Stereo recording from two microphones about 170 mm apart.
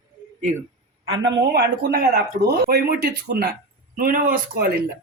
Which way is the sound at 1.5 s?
65° right (ahead or behind).